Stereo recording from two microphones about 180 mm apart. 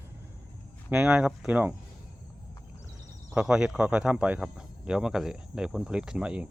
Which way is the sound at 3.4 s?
5° right (ahead or behind).